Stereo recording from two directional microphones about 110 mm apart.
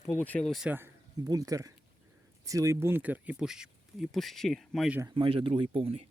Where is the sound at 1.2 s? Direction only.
35° right (ahead or behind); by 3.3 s 15° right (ahead or behind).